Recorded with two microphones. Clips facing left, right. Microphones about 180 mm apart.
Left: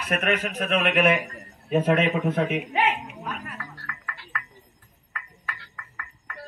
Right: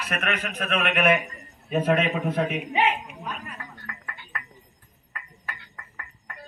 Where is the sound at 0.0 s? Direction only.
45° left (ahead or behind); by 2.4 s 20° left (ahead or behind).